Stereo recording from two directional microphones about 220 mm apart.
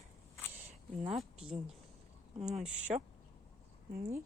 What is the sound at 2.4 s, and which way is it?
Speech, 30° right (ahead or behind).